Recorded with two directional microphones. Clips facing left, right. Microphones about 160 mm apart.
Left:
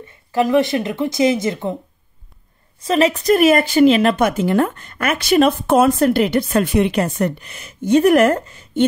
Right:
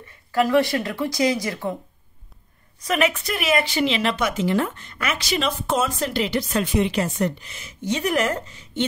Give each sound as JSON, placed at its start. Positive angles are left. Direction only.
{"t": 0.3, "sound": "speech", "side_deg": 20}
{"t": 2.8, "sound": "speech", "side_deg": 30}